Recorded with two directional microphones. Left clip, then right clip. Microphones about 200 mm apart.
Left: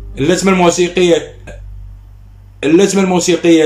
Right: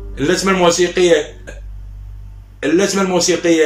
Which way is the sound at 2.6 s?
15° left (ahead or behind).